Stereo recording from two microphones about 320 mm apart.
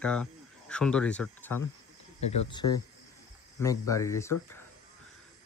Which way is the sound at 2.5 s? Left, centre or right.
Centre.